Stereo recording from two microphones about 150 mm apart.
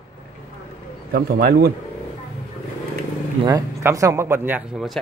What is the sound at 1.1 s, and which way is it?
Speech, 90° right.